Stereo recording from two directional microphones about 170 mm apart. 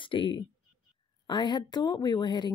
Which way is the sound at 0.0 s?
30° left (ahead or behind).